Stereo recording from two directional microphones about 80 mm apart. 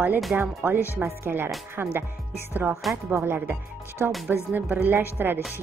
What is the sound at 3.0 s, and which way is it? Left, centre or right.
Speech, right.